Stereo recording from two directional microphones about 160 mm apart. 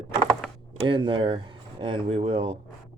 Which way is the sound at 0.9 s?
30° right (ahead or behind).